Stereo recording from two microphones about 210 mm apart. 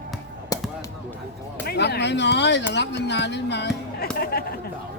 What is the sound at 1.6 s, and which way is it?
A man's voice, 50° left (ahead or behind).